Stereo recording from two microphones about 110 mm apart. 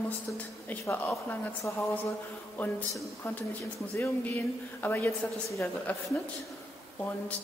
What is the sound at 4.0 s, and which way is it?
Speech, 15° left (ahead or behind).